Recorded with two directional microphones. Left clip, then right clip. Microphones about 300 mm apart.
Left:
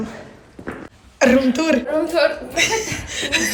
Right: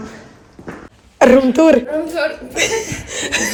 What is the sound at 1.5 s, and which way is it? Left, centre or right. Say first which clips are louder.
Speech: right 7 dB; centre.